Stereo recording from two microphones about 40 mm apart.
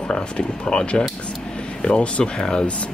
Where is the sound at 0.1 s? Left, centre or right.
Left.